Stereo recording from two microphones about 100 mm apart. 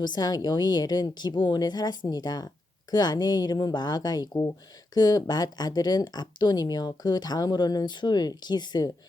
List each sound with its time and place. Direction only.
0.0 s speech: 45° left (ahead or behind)